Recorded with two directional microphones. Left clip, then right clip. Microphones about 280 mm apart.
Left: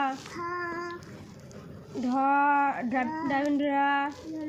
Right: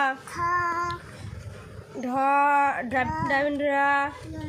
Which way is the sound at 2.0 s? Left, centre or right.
Right.